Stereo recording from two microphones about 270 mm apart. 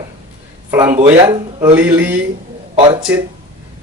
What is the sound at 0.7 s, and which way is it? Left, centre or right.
Speech, centre.